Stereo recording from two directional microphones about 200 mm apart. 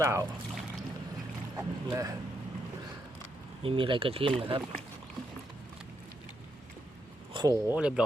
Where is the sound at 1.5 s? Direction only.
15° right (ahead or behind).